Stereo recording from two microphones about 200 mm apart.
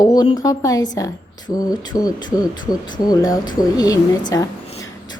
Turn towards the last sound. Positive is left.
turn(degrees=15)  # may be behind; listen again after turning